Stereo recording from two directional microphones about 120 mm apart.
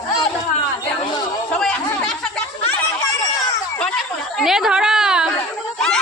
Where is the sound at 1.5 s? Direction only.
10° left (ahead or behind).